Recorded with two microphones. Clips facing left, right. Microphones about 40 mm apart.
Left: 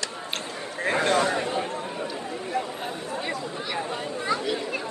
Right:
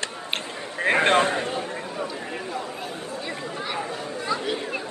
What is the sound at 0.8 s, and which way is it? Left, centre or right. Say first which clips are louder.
Speech: right 3 dB; right.